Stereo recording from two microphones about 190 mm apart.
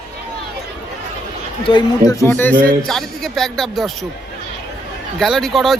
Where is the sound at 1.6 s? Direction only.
25° left (ahead or behind).